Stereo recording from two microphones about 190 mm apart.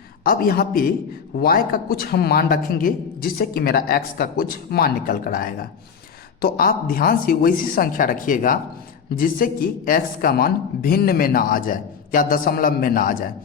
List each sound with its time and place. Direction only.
0.3 s a man's voice: 50° left (ahead or behind)